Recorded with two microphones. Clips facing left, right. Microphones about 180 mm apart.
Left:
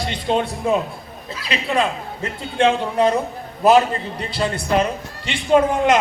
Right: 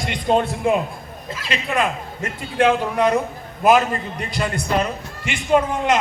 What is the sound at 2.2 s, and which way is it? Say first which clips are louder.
A man's voice: left 1 dB; 25° left (ahead or behind).